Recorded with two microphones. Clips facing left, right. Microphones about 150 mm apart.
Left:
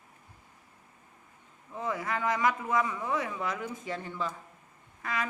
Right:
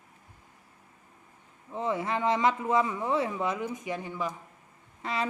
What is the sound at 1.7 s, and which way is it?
Speech, 25° right (ahead or behind).